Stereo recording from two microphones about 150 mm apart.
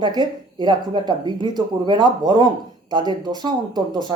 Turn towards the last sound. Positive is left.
turn(degrees=-30)  # may be behind; listen again after turning